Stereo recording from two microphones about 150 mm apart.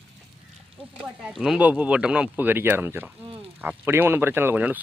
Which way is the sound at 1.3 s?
5° right (ahead or behind).